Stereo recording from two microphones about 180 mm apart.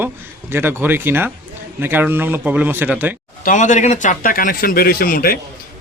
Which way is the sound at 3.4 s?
45° left (ahead or behind).